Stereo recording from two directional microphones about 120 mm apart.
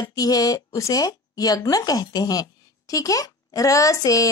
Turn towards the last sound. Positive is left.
turn(degrees=30)  # may be behind; listen again after turning